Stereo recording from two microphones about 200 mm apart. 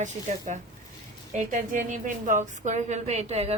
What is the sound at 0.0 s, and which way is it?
A woman's voice, 35° right (ahead or behind).